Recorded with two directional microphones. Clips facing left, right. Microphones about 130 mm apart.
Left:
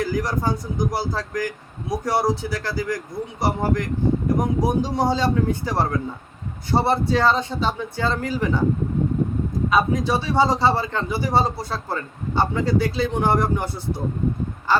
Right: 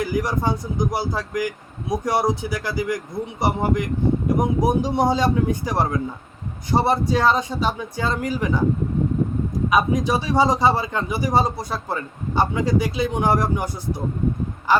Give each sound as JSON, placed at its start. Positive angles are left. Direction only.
{"t": 0.0, "sound": "a man's voice", "side_deg": -20}
{"t": 9.6, "sound": "a man's voice", "side_deg": -15}